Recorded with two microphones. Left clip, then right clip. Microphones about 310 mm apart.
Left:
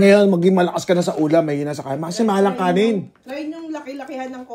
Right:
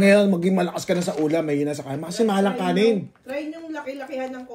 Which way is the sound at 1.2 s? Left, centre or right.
Left.